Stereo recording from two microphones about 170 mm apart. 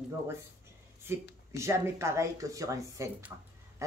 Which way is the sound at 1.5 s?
15° right (ahead or behind).